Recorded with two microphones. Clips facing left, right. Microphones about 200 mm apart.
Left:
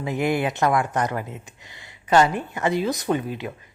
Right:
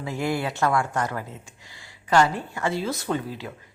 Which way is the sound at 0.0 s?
20° left (ahead or behind).